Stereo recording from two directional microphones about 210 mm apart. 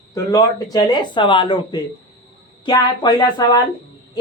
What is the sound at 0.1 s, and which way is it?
Speech, 15° left (ahead or behind).